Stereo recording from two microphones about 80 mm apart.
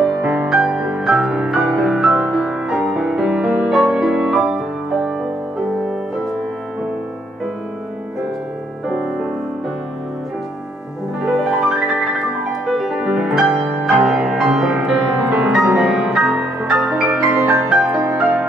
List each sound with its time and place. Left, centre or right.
0.2 s music: centre
11.2 s music: centre
17.1 s music: centre
17.6 s music: centre